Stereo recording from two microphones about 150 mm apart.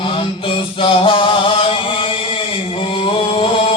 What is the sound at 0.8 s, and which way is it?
Chant, 35° left (ahead or behind).